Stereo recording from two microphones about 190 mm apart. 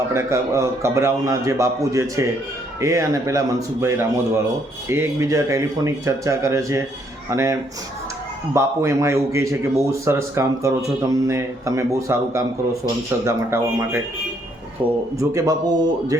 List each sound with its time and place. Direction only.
0.1 s a man's voice: 15° right (ahead or behind)
8.5 s a man's voice: 15° right (ahead or behind)
15.2 s a man's voice: 15° right (ahead or behind)